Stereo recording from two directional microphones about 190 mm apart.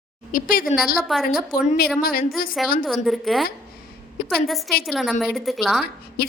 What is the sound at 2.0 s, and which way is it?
Speech, 50° left (ahead or behind).